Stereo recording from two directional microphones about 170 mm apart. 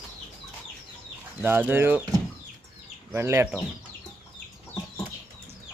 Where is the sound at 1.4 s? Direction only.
10° right (ahead or behind).